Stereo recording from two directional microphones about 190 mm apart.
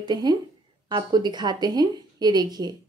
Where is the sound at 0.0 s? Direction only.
20° right (ahead or behind).